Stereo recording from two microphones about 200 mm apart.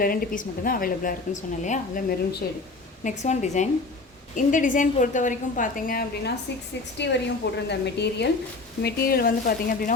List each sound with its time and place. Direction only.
0.0 s a woman's voice: 45° left (ahead or behind)
6.9 s a woman's voice: 60° left (ahead or behind)